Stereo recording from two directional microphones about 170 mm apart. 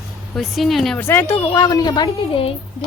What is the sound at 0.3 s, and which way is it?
Speech, centre (ahead or behind).